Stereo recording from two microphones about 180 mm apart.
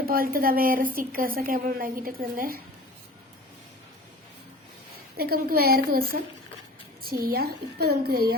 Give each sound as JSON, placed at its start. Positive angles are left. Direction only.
{"t": 0.0, "sound": "a woman's voice", "side_deg": -55}
{"t": 5.1, "sound": "a woman's voice", "side_deg": -55}